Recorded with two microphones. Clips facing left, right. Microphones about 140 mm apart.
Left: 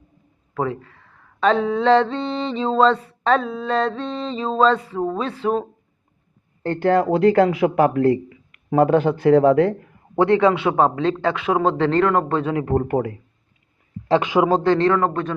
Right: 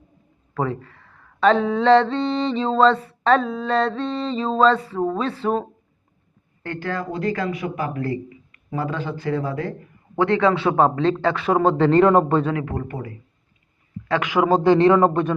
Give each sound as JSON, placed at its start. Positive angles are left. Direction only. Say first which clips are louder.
{"t": 0.5, "sound": "speech", "louder": "left 1 dB", "side_deg": 5}
{"t": 6.7, "sound": "speech", "louder": "left 10 dB", "side_deg": 60}
{"t": 10.2, "sound": "a man's voice", "louder": "left 3 dB", "side_deg": 20}
{"t": 10.8, "sound": "speech", "louder": "even", "side_deg": 5}
{"t": 12.6, "sound": "speech", "louder": "left 8 dB", "side_deg": 45}
{"t": 12.9, "sound": "speech", "louder": "left 11 dB", "side_deg": 65}
{"t": 14.1, "sound": "a man's voice", "louder": "left 4 dB", "side_deg": 25}
{"t": 14.6, "sound": "speech", "louder": "right 3 dB", "side_deg": -15}